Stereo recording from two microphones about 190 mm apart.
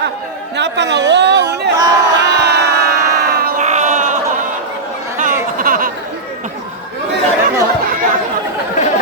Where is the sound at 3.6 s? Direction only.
40° right (ahead or behind).